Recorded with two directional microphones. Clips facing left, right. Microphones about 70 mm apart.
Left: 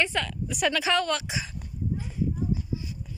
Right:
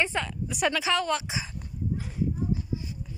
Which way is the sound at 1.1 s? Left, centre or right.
Right.